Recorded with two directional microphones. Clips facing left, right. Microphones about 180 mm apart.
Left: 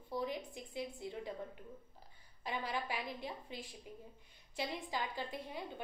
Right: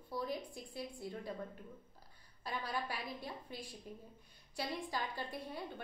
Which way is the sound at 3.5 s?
20° left (ahead or behind).